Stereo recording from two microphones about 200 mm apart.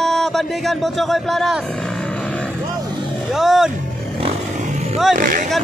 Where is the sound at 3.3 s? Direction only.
Centre (ahead or behind).